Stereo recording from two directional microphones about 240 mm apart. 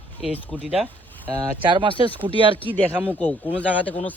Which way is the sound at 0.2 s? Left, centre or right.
Centre.